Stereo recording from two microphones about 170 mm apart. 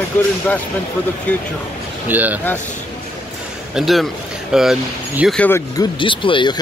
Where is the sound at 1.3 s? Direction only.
10° left (ahead or behind).